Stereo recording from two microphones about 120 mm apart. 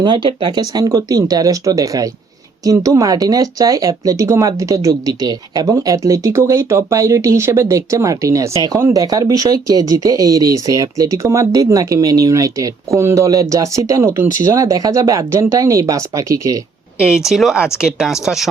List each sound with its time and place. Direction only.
0.0 s speech: 40° right (ahead or behind)
17.0 s speech: 5° right (ahead or behind)